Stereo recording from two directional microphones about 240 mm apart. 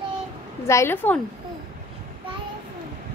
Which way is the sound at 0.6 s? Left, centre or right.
Centre.